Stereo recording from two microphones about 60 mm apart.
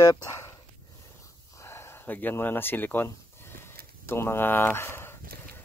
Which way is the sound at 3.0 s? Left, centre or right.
Left.